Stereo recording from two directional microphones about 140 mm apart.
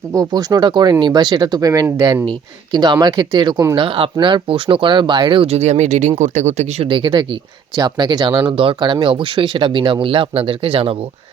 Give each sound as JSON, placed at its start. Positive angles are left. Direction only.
{"t": 0.1, "sound": "speech", "side_deg": -25}
{"t": 3.8, "sound": "speech", "side_deg": -40}
{"t": 5.5, "sound": "speech", "side_deg": -55}
{"t": 6.8, "sound": "speech", "side_deg": -35}